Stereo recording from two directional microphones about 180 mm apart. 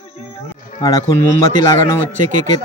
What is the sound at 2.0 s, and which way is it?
Speech, 45° right (ahead or behind).